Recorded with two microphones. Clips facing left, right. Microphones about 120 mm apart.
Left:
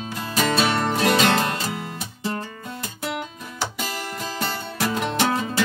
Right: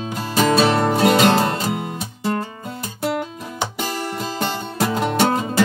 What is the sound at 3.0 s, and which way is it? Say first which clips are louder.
Music: right 7 dB; 40° right (ahead or behind).